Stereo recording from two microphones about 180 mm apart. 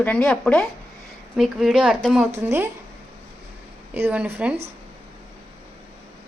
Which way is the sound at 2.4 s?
15° right (ahead or behind).